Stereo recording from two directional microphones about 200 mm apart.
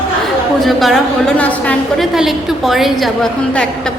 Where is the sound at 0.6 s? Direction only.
Centre (ahead or behind).